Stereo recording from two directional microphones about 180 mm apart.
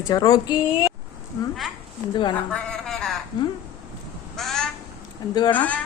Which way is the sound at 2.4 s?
5° left (ahead or behind).